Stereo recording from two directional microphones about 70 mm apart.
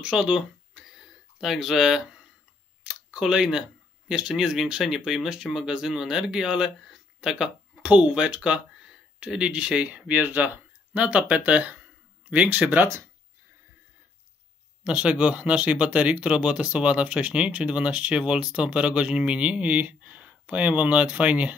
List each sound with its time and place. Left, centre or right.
0.0 s speech: centre
2.8 s a sound: centre
3.3 s speech: centre; by 12.8 s right
14.8 s speech: centre